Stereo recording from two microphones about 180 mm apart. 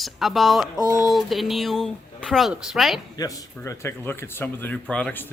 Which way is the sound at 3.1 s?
20° left (ahead or behind).